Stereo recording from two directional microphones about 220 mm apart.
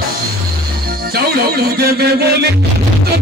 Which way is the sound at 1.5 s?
45° right (ahead or behind).